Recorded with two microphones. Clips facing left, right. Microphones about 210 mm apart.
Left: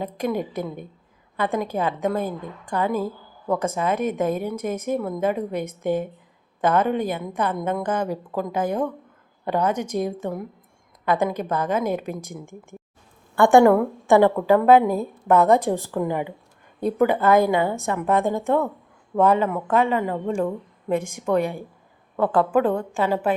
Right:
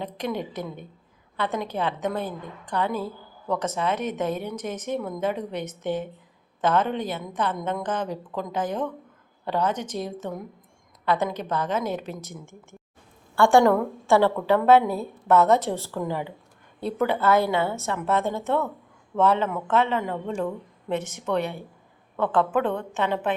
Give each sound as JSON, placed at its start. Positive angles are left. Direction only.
{"t": 0.0, "sound": "a woman's voice", "side_deg": 10}
{"t": 1.7, "sound": "a woman's voice", "side_deg": 45}
{"t": 2.2, "sound": "a woman's voice", "side_deg": 10}
{"t": 13.3, "sound": "a woman's voice", "side_deg": 15}